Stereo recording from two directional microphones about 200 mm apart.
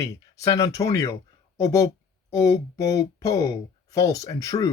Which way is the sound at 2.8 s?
15° left (ahead or behind).